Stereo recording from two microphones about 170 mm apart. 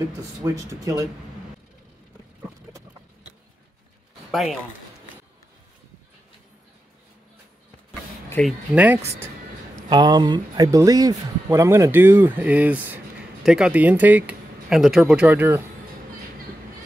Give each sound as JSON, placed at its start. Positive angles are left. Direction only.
{"t": 0.2, "sound": "speech", "side_deg": -20}
{"t": 4.3, "sound": "speech", "side_deg": 0}
{"t": 8.3, "sound": "speech", "side_deg": 5}
{"t": 8.7, "sound": "speech", "side_deg": -10}
{"t": 9.8, "sound": "speech", "side_deg": -25}